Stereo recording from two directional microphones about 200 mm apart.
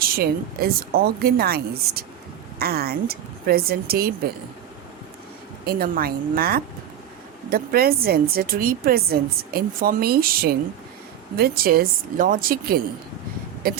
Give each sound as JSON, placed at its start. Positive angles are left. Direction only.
{"t": 0.0, "sound": "a woman's voice", "side_deg": -50}
{"t": 5.6, "sound": "a woman's voice", "side_deg": -50}